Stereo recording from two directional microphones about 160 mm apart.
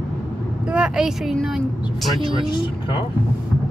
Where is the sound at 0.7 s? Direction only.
5° right (ahead or behind).